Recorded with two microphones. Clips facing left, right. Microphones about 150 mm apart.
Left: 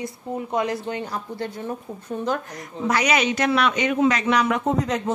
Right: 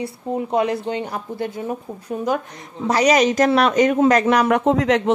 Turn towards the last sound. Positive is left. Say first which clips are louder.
# right 6 dB
turn(degrees=-80)